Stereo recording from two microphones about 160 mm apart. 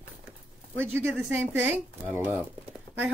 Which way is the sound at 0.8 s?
15° right (ahead or behind).